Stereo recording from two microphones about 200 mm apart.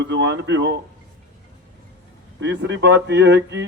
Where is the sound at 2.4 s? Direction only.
65° right (ahead or behind).